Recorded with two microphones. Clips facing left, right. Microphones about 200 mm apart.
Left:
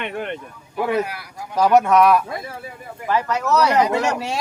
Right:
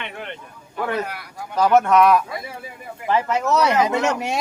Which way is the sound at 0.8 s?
5° left (ahead or behind).